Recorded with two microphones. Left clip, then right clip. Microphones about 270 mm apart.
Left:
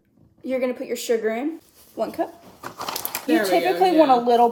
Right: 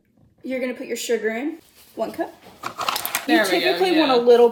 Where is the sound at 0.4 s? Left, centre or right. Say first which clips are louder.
Left 2 dB; centre.